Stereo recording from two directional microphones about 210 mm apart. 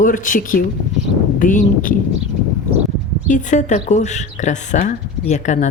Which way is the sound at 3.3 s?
35° left (ahead or behind).